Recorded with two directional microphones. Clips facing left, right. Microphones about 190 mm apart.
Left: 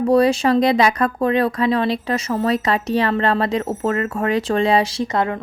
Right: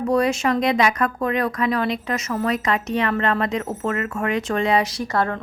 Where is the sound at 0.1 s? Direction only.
30° left (ahead or behind).